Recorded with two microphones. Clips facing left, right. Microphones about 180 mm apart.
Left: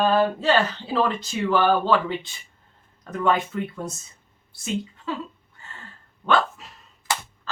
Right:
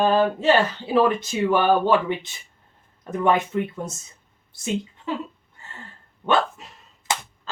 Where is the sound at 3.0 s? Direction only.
20° right (ahead or behind).